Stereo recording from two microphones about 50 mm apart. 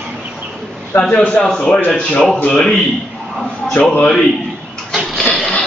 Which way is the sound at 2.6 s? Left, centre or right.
Centre.